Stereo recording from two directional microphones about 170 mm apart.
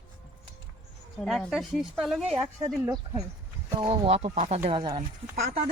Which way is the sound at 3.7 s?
35° right (ahead or behind).